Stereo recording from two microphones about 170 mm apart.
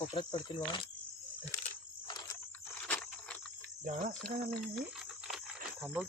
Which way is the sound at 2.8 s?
5° left (ahead or behind).